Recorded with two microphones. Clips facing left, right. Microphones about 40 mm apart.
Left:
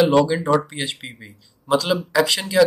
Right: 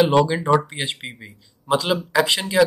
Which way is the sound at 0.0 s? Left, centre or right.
Centre.